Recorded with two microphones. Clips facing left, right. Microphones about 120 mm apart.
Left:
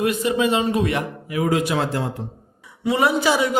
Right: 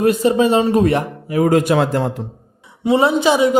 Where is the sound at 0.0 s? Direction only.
35° right (ahead or behind); by 2.0 s 55° right (ahead or behind).